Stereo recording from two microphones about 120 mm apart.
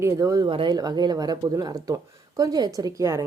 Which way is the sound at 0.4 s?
40° right (ahead or behind).